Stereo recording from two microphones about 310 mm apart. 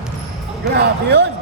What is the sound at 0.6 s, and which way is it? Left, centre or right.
Speech, right.